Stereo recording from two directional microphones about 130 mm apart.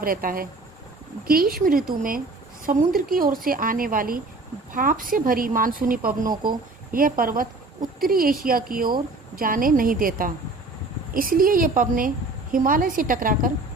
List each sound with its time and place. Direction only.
0.0 s a woman's voice: 90° right
1.6 s a woman's voice: 90° right